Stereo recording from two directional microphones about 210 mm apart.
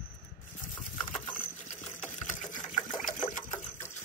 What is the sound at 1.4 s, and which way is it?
Sewing machine, 35° left (ahead or behind).